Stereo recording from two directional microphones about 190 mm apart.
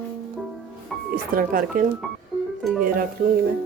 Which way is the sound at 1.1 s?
45° right (ahead or behind).